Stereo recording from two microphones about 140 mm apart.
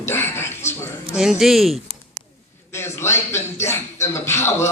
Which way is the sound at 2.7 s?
20° left (ahead or behind).